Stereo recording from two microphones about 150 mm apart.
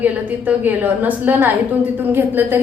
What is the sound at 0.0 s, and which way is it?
A woman's voice, 10° right (ahead or behind).